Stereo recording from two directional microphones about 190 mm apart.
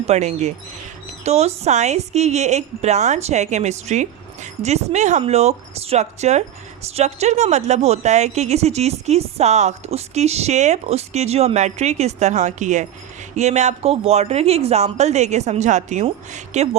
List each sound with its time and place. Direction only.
0.0 s a woman's voice: 35° right (ahead or behind)